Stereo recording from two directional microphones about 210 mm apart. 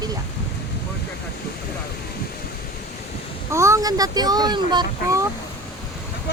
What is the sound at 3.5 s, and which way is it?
Speech, 15° right (ahead or behind).